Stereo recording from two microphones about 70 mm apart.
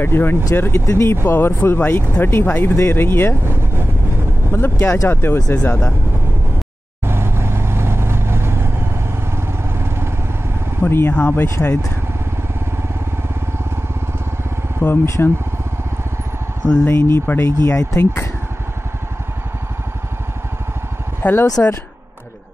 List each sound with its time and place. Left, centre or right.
0.0 s speech: left
1.2 s speech: left
4.5 s speech: left
7.1 s vehicle: right
10.9 s speech: left
11.1 s speech: left
11.4 s speech: left
14.8 s speech: left
16.8 s speech: left
21.2 s speech: left